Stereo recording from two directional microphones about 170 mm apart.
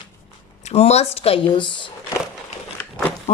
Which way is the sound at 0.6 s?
40° left (ahead or behind).